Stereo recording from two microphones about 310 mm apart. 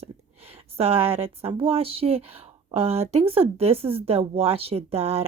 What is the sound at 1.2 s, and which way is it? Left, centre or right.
Speech, centre.